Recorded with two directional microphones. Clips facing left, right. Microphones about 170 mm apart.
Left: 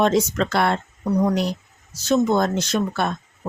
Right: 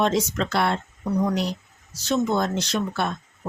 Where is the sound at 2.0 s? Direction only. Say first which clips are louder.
Left 4 dB; 45° left (ahead or behind).